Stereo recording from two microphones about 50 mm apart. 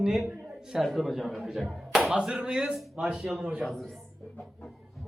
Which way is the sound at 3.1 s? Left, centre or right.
Centre.